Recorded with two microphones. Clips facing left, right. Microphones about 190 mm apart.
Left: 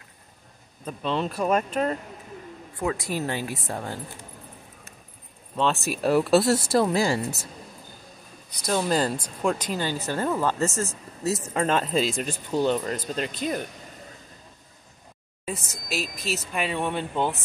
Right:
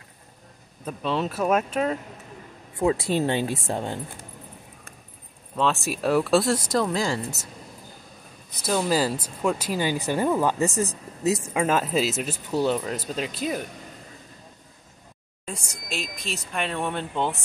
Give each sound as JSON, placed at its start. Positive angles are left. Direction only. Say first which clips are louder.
{"t": 0.8, "sound": "speech", "louder": "right 1 dB", "side_deg": -5}
{"t": 2.8, "sound": "speech", "louder": "right 5 dB", "side_deg": -25}
{"t": 5.6, "sound": "speech", "louder": "even", "side_deg": 0}
{"t": 8.6, "sound": "speech", "louder": "right 1 dB", "side_deg": -5}
{"t": 15.4, "sound": "speech", "louder": "left 3 dB", "side_deg": 5}